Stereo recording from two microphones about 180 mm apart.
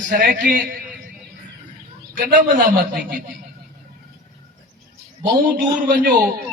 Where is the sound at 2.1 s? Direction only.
50° right (ahead or behind).